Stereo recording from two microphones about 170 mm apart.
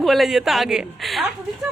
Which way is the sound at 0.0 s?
Centre (ahead or behind).